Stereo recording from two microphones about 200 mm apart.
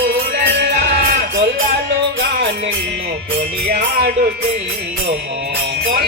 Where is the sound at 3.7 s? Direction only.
50° right (ahead or behind).